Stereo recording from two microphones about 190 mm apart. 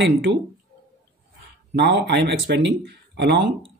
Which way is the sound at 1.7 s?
65° right (ahead or behind).